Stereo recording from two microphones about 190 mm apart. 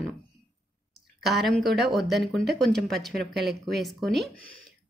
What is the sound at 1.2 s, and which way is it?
Speech, centre (ahead or behind).